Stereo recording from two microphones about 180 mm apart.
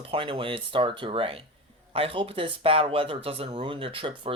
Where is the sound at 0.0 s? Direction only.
30° right (ahead or behind).